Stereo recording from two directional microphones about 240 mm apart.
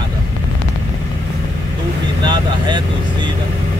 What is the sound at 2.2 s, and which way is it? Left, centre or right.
Vehicle, centre.